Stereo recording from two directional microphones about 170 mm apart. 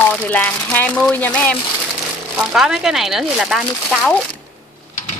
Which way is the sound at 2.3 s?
5° right (ahead or behind).